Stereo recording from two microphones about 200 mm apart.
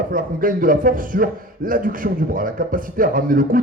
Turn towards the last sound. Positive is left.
turn(degrees=-45)  # may be behind; listen again after turning